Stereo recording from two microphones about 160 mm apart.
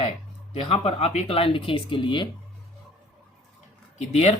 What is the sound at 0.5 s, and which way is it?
Speech, 40° left (ahead or behind).